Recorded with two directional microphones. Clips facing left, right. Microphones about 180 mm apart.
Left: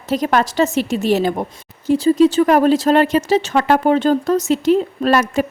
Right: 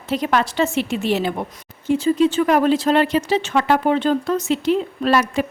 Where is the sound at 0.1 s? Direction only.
40° left (ahead or behind).